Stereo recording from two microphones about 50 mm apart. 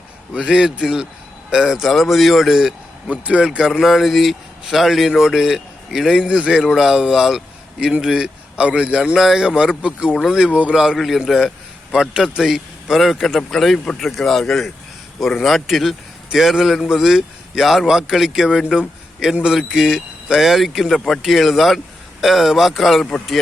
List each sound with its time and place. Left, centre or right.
0.3 s a man's voice: centre
3.1 s a man's voice: right
3.4 s a man's voice: centre
3.7 s a man's voice: centre
8.5 s a man's voice: right
9.1 s a man's voice: centre
10.9 s a man's voice: centre